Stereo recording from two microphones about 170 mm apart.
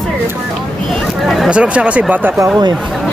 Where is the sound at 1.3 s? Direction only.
5° right (ahead or behind).